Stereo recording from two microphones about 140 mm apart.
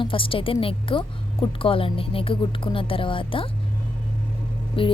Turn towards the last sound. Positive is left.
turn(degrees=40)  # may be behind; listen again after turning